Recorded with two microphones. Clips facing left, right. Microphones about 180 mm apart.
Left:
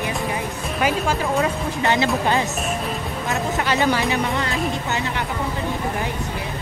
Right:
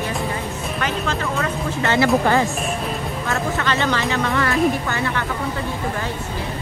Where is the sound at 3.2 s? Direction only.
20° left (ahead or behind).